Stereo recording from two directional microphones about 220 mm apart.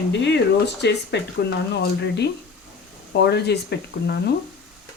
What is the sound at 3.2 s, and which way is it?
Speech, 50° left (ahead or behind).